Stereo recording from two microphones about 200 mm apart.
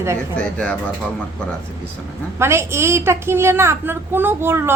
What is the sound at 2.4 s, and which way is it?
A woman's voice, 15° right (ahead or behind).